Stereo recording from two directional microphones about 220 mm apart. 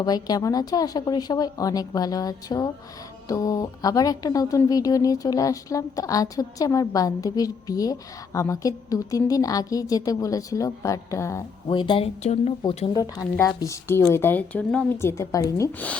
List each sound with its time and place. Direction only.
0.0 s a woman's voice: 15° left (ahead or behind)